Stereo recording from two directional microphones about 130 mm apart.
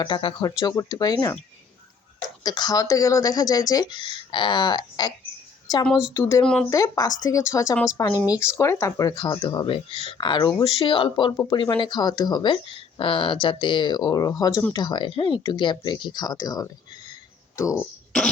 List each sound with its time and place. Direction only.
0.0 s speech: 40° left (ahead or behind)
2.4 s a woman's voice: 30° left (ahead or behind)
5.9 s speech: 5° right (ahead or behind)
6.1 s speech: 25° left (ahead or behind)
6.4 s speech: 5° left (ahead or behind)
6.7 s speech: 25° left (ahead or behind)